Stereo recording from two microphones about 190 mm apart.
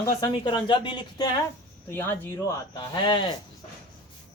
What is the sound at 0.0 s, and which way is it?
A woman's voice, 20° left (ahead or behind).